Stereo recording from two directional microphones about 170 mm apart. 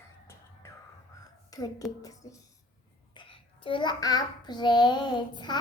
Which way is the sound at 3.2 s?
30° left (ahead or behind).